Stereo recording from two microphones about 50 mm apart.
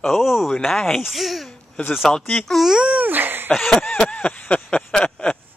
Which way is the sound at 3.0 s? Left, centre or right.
Right.